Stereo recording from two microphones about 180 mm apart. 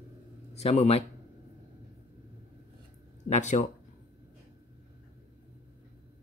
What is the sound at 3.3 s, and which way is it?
Speech, 40° left (ahead or behind).